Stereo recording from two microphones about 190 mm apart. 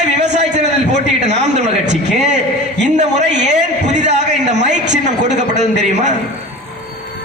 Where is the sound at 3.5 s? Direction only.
40° right (ahead or behind).